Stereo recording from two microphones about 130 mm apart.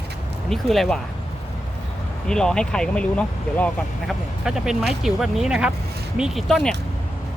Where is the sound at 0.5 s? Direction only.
Centre (ahead or behind).